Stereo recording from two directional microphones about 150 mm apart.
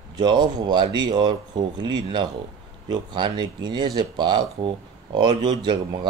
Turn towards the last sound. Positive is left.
turn(degrees=-30)  # may be behind; listen again after turning